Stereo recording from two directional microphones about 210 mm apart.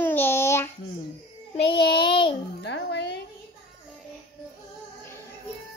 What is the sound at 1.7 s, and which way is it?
Child singing, 25° left (ahead or behind).